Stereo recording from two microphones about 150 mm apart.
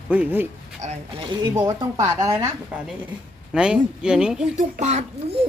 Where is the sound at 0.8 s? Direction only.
50° right (ahead or behind).